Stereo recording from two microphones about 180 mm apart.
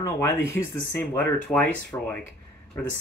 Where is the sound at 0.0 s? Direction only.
15° left (ahead or behind).